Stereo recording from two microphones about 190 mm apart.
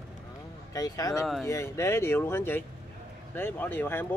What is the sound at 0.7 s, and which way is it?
Speech, 20° left (ahead or behind).